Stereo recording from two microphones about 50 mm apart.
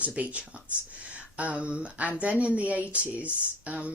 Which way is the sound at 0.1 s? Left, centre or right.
Right.